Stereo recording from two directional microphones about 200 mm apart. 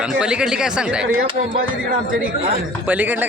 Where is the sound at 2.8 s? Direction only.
10° right (ahead or behind).